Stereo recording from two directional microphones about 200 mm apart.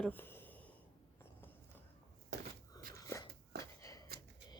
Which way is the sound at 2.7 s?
20° left (ahead or behind).